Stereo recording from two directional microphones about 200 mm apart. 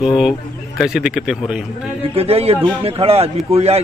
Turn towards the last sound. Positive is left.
turn(degrees=-30)  # may be behind; listen again after turning